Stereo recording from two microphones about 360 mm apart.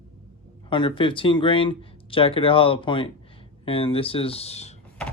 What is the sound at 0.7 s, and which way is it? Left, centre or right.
Speech, centre.